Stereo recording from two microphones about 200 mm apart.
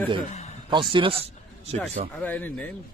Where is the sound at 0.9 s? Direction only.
25° right (ahead or behind).